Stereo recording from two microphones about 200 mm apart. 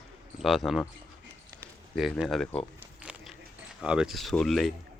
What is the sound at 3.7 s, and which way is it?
Speech, 5° right (ahead or behind).